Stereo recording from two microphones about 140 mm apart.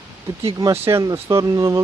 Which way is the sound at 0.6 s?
20° right (ahead or behind).